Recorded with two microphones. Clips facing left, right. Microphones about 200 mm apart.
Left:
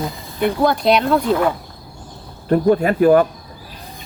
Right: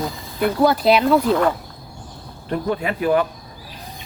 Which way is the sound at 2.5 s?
45° left (ahead or behind).